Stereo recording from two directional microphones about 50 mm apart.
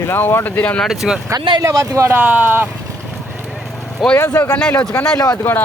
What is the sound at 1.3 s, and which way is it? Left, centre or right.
Speech, right.